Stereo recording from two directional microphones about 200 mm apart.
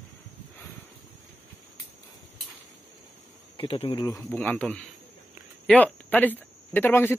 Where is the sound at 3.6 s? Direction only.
30° left (ahead or behind).